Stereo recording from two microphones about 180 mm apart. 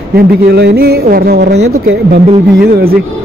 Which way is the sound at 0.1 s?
65° right (ahead or behind).